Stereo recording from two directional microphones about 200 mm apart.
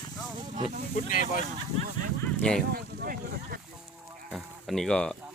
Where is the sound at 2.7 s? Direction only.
50° right (ahead or behind).